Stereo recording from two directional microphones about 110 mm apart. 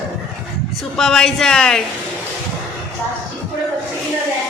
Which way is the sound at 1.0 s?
5° left (ahead or behind).